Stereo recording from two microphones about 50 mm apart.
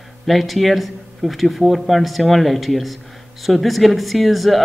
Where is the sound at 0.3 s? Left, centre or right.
Centre.